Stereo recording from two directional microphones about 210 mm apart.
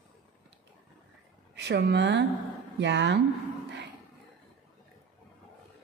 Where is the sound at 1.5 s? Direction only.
55° right (ahead or behind).